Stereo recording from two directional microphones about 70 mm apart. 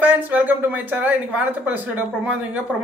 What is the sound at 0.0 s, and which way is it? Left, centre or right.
Speech, right.